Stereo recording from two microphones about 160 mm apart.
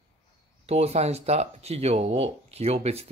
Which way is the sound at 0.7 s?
40° right (ahead or behind).